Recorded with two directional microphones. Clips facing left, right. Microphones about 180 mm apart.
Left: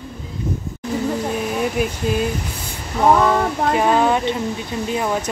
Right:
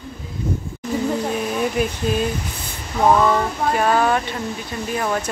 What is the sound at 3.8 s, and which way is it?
Speech, 20° left (ahead or behind).